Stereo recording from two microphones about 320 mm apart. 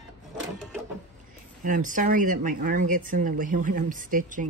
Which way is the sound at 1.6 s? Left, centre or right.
Right.